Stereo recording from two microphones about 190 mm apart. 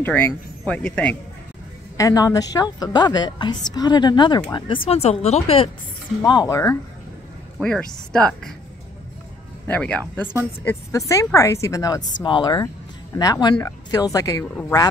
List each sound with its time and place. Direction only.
0.0 s speech: 10° left (ahead or behind)
2.0 s speech: 20° left (ahead or behind)
6.2 s speech: 20° left (ahead or behind)
7.6 s speech: 5° left (ahead or behind)
9.7 s speech: 5° left (ahead or behind)